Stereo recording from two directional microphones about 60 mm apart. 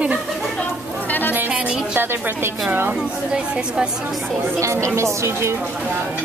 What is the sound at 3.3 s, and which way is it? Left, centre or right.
Speech, centre.